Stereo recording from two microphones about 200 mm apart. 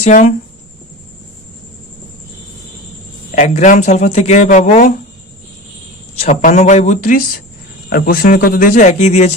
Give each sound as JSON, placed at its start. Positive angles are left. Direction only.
{"t": 0.0, "sound": "speech", "side_deg": 40}
{"t": 3.3, "sound": "speech", "side_deg": 35}
{"t": 6.1, "sound": "speech", "side_deg": 35}